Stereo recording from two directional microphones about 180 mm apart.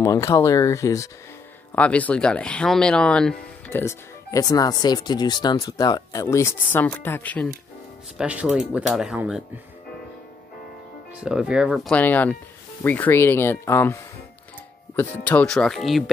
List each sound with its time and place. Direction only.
0.0 s speech: 15° left (ahead or behind)
8.2 s speech: 5° right (ahead or behind)
11.1 s speech: 5° right (ahead or behind)